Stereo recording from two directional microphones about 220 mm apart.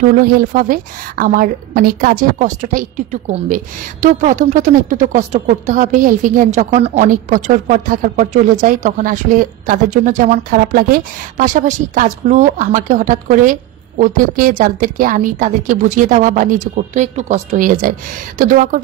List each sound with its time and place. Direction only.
0.2 s a woman's voice: 40° right (ahead or behind)